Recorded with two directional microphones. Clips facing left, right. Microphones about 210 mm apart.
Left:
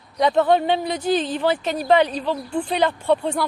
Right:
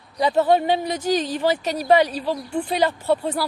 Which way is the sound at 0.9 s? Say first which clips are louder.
Left 1 dB; 40° right (ahead or behind).